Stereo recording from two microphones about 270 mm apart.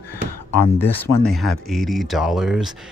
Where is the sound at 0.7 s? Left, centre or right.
Centre.